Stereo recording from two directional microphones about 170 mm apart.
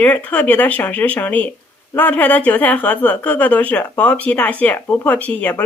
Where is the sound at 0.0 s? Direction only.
10° left (ahead or behind).